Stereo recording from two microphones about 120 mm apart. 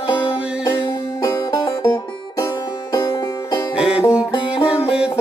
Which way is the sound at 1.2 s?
30° left (ahead or behind).